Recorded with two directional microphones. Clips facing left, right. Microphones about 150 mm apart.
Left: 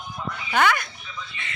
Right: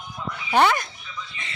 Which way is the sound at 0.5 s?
30° right (ahead or behind).